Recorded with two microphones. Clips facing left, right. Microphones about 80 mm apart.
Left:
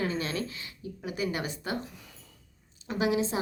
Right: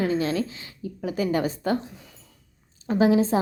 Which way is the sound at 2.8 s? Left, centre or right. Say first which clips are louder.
Right 8 dB; right.